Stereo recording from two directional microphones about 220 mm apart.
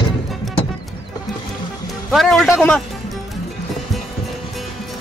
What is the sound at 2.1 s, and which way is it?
Speech, centre (ahead or behind).